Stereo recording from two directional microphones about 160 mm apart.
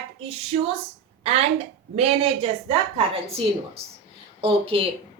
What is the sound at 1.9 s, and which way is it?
Speech, 40° right (ahead or behind).